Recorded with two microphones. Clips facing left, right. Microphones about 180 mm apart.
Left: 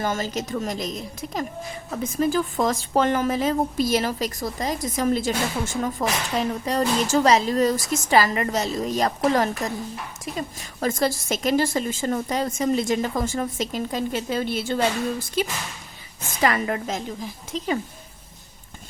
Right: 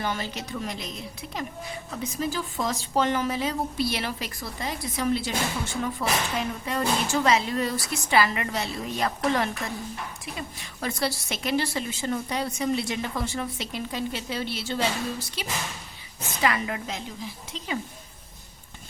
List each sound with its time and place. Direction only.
0.0 s a woman's voice: 45° left (ahead or behind)